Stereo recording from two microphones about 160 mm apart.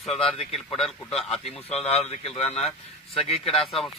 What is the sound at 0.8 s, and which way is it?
Speech, centre (ahead or behind).